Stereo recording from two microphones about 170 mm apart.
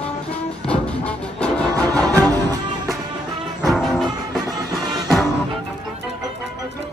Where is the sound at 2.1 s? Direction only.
20° right (ahead or behind).